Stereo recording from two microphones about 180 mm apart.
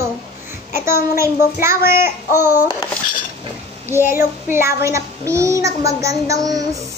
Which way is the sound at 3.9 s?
15° right (ahead or behind).